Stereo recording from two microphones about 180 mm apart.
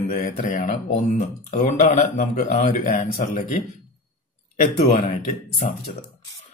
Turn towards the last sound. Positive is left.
turn(degrees=45)  # may be behind; listen again after turning